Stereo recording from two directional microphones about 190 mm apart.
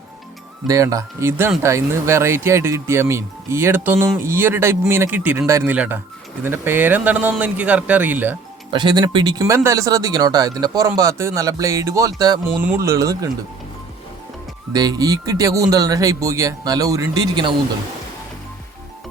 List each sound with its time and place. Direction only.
0.7 s speech: 15° right (ahead or behind)
8.7 s speech: 20° right (ahead or behind)
14.7 s speech: 20° right (ahead or behind)